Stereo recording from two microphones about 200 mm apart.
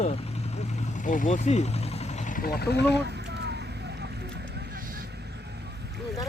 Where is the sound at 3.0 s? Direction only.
55° right (ahead or behind).